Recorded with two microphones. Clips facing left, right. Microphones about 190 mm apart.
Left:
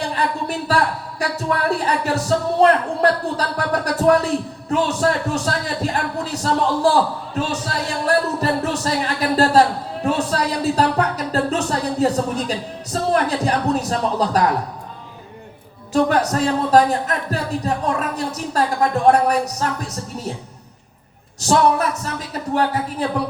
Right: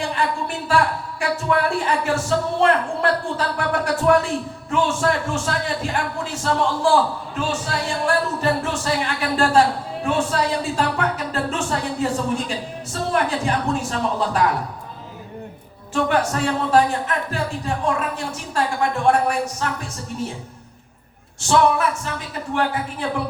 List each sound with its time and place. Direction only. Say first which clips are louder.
0.1 s a sound: left 1 dB; 35° left (ahead or behind)
1.2 s speech: right 1 dB; 40° left (ahead or behind)
15.9 s speech: left 3 dB; 40° left (ahead or behind)
21.4 s speech: left 1 dB; 40° left (ahead or behind)